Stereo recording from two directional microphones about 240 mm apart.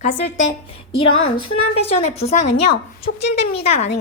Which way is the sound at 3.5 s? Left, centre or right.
Left.